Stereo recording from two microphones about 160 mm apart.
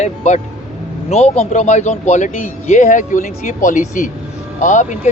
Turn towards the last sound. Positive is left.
turn(degrees=50)  # may be behind; listen again after turning